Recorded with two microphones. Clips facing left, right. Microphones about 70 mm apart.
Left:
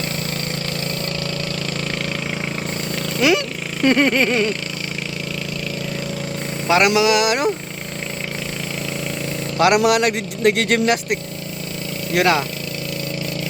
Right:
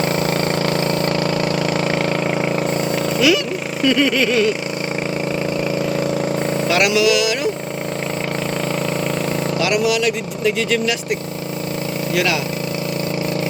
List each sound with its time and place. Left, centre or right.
0.0 s vehicle: right
2.0 s vehicle: centre
3.2 s speech: left
6.8 s speech: left
9.6 s speech: left
12.1 s speech: left